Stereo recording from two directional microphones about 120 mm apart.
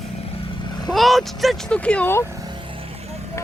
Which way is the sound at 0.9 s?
Centre (ahead or behind).